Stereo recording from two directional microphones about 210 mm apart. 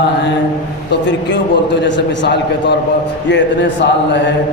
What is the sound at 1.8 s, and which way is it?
Speech, 55° left (ahead or behind).